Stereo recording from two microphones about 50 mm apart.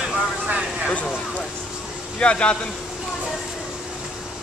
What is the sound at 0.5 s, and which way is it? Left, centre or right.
Speech, centre.